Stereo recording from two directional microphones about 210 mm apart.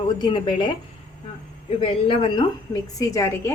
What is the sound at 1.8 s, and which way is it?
Speech, 25° left (ahead or behind).